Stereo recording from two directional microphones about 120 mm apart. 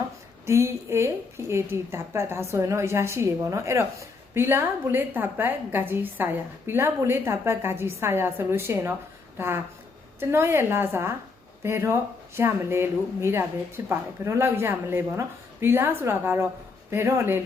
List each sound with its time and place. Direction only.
0.4 s a woman's voice: 20° right (ahead or behind)
10.2 s a woman's voice: 20° right (ahead or behind)